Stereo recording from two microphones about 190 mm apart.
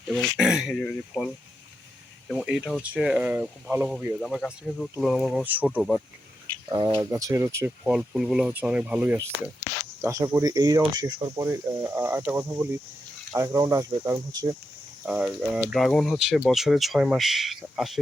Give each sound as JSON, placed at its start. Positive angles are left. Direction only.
{"t": 0.1, "sound": "speech", "side_deg": 0}
{"t": 6.7, "sound": "speech", "side_deg": -15}
{"t": 15.0, "sound": "speech", "side_deg": -5}